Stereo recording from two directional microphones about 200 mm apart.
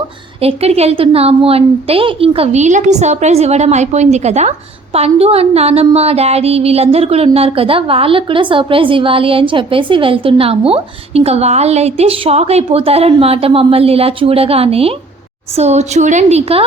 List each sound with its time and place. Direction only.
0.4 s a woman's voice: 30° right (ahead or behind)